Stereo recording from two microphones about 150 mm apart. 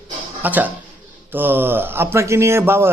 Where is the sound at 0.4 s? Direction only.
10° right (ahead or behind).